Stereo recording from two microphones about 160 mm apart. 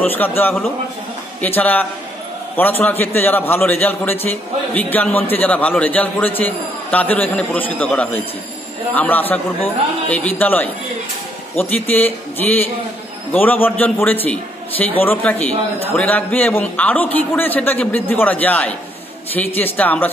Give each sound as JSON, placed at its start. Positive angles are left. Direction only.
{"t": 0.0, "sound": "a man's voice", "side_deg": 10}
{"t": 11.9, "sound": "a man's voice", "side_deg": 10}